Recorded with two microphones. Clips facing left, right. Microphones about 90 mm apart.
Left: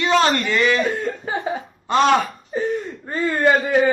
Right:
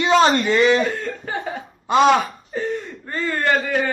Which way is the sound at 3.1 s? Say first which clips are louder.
Left 3 dB; 15° left (ahead or behind).